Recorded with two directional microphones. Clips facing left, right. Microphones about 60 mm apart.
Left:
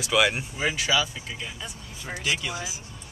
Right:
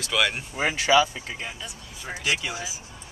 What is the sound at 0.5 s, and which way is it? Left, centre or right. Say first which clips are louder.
Speech: right 5 dB; right.